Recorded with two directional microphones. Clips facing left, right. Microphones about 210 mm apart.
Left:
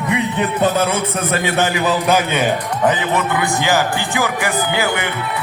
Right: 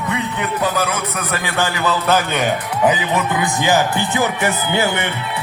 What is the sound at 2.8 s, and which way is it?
Speech, 15° right (ahead or behind).